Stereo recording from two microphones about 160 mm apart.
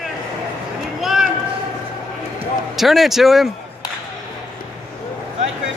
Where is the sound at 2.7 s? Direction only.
Centre (ahead or behind).